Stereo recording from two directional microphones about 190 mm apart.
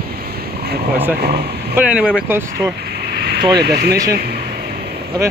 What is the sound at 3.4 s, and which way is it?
Speech, 20° right (ahead or behind).